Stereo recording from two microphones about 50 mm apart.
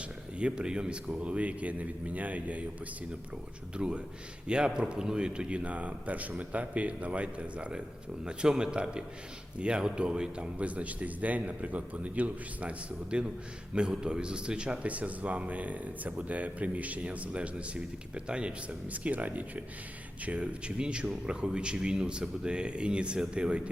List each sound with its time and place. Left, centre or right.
0.3 s a man's voice: centre
3.8 s a man's voice: right
13.1 s speech: centre